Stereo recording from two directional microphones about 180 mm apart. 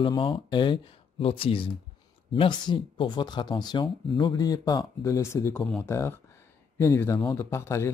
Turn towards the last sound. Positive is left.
turn(degrees=15)  # may be behind; listen again after turning